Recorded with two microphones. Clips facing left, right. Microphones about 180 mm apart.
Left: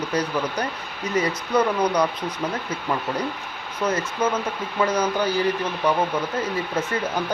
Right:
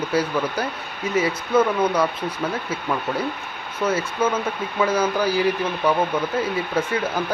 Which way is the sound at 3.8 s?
5° right (ahead or behind).